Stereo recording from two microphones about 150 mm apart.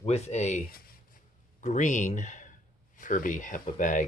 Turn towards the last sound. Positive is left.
turn(degrees=60)  # may be behind; listen again after turning